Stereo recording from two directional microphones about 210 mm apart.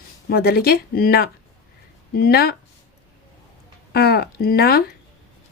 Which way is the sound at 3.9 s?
50° left (ahead or behind).